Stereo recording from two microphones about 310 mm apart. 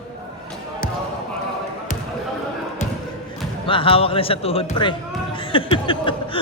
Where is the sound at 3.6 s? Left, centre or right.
Centre.